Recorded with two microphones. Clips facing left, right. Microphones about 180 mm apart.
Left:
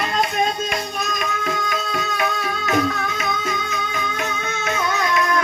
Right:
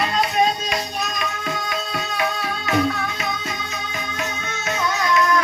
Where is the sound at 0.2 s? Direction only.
50° left (ahead or behind).